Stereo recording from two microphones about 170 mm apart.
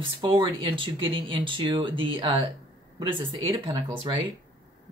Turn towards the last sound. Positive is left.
turn(degrees=-30)  # may be behind; listen again after turning